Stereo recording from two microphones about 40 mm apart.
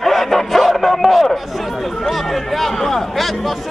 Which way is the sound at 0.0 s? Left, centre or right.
Centre.